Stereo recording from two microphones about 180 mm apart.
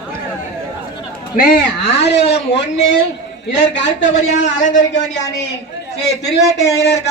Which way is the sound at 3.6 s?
85° left.